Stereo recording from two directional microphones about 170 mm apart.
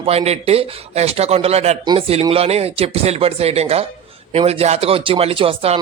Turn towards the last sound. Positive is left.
turn(degrees=-35)  # may be behind; listen again after turning